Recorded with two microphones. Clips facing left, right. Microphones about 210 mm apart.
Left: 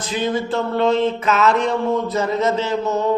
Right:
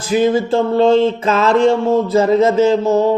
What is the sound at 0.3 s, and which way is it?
A man's voice, 30° right (ahead or behind).